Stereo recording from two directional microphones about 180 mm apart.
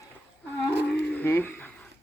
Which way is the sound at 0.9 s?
10° left (ahead or behind).